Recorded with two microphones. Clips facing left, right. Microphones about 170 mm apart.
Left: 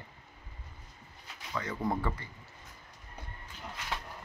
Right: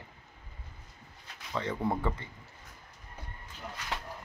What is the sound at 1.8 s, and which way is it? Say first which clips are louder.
Speech: left 1 dB; 10° right (ahead or behind).